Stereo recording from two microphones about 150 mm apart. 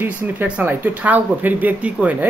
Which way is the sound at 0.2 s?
10° right (ahead or behind).